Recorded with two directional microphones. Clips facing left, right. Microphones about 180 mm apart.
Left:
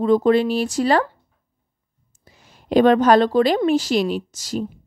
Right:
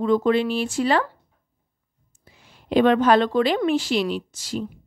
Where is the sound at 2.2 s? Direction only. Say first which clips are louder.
Left 2 dB; 40° left (ahead or behind).